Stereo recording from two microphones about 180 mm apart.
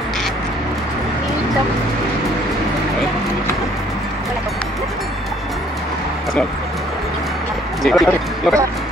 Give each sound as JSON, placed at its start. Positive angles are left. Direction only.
{"t": 7.8, "sound": "speech", "side_deg": 0}